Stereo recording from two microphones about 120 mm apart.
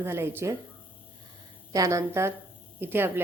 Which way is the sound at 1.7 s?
25° right (ahead or behind).